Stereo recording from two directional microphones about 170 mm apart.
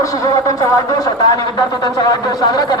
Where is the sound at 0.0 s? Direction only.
20° left (ahead or behind).